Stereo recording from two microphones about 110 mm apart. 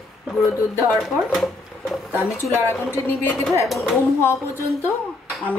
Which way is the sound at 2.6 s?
20° left (ahead or behind).